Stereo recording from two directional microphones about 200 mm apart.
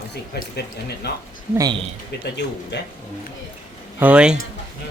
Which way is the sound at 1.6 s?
20° right (ahead or behind).